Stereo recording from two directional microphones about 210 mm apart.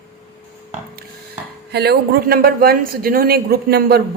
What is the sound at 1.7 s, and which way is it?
Speech, 50° right (ahead or behind).